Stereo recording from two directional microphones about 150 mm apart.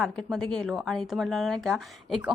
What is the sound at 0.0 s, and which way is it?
Speech, 5° left (ahead or behind).